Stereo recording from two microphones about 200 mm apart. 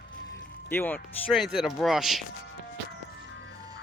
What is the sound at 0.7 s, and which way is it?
Speech, 10° left (ahead or behind).